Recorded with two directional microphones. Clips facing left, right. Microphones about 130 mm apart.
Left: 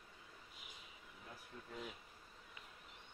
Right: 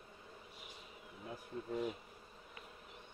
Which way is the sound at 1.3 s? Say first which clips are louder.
Right 11 dB; 45° right (ahead or behind).